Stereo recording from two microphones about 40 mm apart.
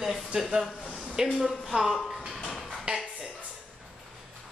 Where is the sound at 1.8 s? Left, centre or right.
Centre.